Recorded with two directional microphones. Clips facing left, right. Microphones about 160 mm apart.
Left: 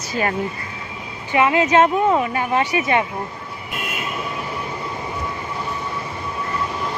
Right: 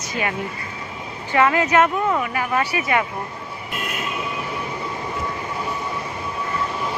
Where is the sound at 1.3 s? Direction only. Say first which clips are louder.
Left 1 dB; 20° left (ahead or behind).